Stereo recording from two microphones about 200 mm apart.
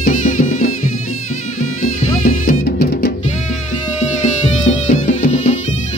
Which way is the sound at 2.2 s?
45° left (ahead or behind).